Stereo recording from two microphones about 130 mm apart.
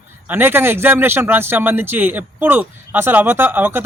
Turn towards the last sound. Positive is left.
turn(degrees=-15)  # may be behind; listen again after turning